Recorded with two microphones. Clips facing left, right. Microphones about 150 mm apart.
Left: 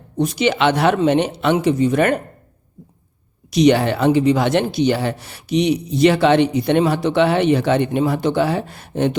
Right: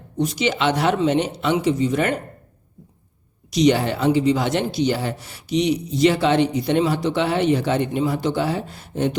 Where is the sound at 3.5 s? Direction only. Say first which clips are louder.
Left 3 dB; 65° left (ahead or behind).